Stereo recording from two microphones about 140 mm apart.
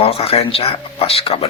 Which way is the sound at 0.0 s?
45° left (ahead or behind).